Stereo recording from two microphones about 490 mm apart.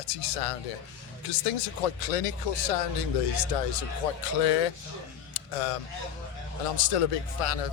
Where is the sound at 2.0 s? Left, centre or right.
Left.